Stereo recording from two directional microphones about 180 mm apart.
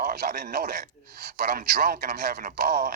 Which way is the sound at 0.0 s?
55° right (ahead or behind).